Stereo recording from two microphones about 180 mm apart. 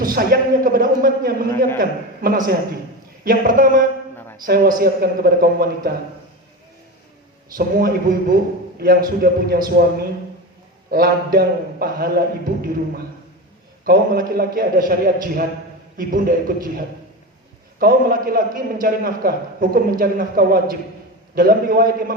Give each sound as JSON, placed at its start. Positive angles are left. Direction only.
{"t": 0.0, "sound": "a man's voice", "side_deg": -55}
{"t": 7.5, "sound": "a man's voice", "side_deg": -50}
{"t": 10.9, "sound": "a man's voice", "side_deg": -55}
{"t": 13.8, "sound": "a man's voice", "side_deg": -55}